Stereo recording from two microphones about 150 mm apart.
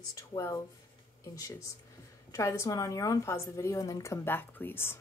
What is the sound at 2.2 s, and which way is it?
Speech, 20° left (ahead or behind).